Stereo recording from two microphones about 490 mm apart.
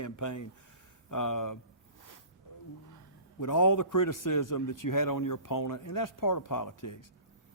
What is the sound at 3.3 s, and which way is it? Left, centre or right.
Speech, left.